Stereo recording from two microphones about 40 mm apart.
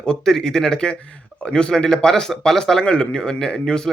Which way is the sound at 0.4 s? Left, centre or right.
Centre.